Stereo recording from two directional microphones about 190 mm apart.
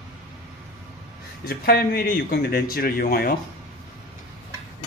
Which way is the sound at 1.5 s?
55° left (ahead or behind).